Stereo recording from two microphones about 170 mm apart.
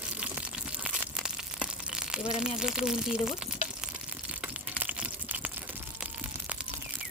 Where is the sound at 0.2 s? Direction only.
10° right (ahead or behind).